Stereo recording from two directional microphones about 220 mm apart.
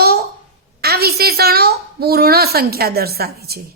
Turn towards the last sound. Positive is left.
turn(degrees=-45)  # may be behind; listen again after turning